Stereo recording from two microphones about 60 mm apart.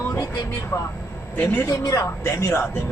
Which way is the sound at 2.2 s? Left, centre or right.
Left.